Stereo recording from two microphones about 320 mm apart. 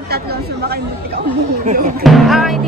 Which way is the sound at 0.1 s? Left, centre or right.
Right.